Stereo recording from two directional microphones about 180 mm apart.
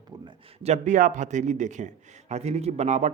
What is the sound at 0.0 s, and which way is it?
Speech, 25° right (ahead or behind).